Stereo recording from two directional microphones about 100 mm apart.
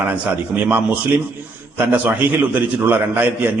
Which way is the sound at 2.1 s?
20° right (ahead or behind).